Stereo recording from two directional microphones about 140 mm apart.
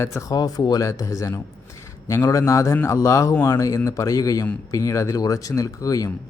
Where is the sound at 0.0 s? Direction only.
20° left (ahead or behind).